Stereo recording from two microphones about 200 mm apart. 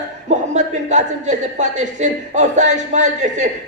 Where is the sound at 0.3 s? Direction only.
35° right (ahead or behind).